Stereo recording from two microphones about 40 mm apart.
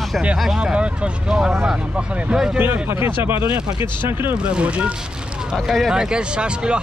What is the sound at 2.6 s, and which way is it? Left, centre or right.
Speech, right.